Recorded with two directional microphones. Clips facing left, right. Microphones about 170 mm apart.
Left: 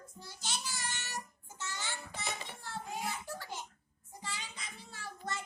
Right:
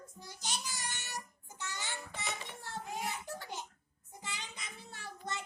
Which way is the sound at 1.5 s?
15° right (ahead or behind).